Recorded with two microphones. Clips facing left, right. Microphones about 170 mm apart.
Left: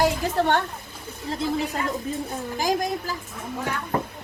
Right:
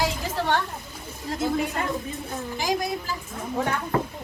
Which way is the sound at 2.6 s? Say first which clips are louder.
Left 2 dB; 45° left (ahead or behind).